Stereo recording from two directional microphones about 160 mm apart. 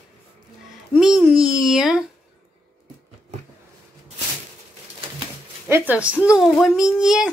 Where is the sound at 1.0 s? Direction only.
5° right (ahead or behind).